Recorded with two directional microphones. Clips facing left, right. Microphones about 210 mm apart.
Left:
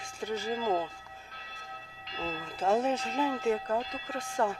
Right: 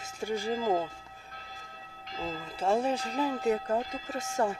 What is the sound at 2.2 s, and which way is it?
Speech, 5° right (ahead or behind).